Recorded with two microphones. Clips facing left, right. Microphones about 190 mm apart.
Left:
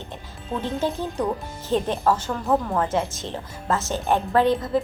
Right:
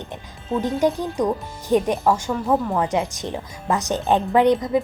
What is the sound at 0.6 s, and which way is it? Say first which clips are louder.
A woman's voice: right 5 dB; 15° right (ahead or behind).